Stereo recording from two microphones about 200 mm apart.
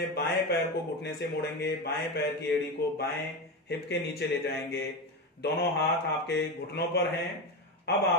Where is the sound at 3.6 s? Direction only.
55° left (ahead or behind).